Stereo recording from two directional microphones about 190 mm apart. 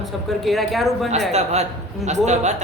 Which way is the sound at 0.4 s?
Centre (ahead or behind).